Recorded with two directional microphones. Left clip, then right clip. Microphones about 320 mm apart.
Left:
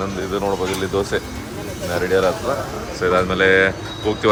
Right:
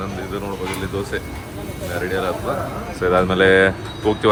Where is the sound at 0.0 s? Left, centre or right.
Centre.